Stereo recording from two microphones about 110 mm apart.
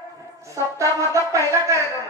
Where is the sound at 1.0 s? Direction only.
30° right (ahead or behind).